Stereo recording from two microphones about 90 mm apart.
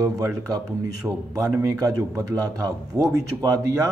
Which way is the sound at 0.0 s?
40° right (ahead or behind).